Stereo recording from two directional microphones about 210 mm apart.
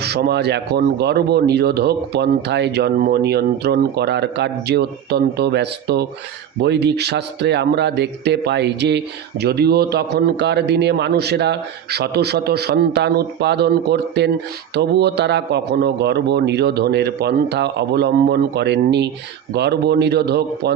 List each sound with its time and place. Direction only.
0.0 s speech: 50° right (ahead or behind)